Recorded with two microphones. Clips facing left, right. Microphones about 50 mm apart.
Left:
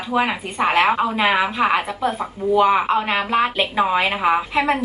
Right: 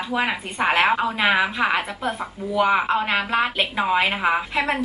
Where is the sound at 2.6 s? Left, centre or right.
Centre.